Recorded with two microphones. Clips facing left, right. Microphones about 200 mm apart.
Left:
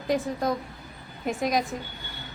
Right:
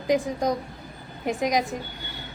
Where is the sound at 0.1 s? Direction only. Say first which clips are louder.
Right 3 dB; 15° right (ahead or behind).